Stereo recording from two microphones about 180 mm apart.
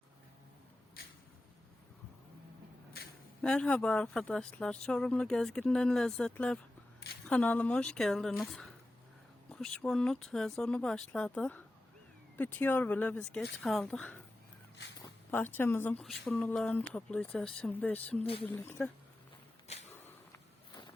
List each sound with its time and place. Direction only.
3.4 s speech: 5° left (ahead or behind)
15.3 s speech: 10° left (ahead or behind)
18.2 s speech: 30° left (ahead or behind)
18.4 s speech: 10° left (ahead or behind)